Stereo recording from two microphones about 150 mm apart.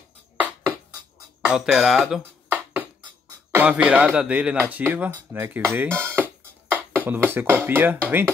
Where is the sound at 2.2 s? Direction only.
10° right (ahead or behind).